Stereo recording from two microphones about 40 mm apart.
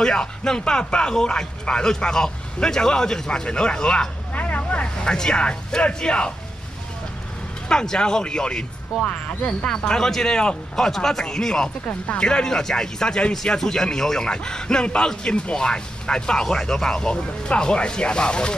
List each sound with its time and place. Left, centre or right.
0.0 s speech: centre
4.3 s vehicle: left
4.9 s speech: left
7.6 s speech: centre
9.9 s speech: centre